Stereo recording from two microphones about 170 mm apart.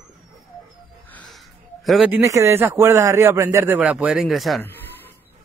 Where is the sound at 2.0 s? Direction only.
15° right (ahead or behind); by 4.6 s centre (ahead or behind).